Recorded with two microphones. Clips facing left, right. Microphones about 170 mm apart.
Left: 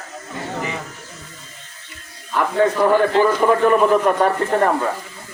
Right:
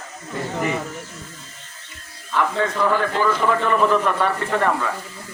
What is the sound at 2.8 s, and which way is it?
A man's voice, 50° left (ahead or behind).